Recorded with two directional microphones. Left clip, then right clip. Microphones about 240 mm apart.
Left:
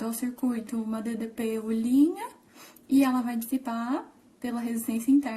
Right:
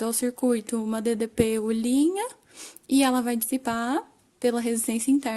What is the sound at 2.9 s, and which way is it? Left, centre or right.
Speech, right.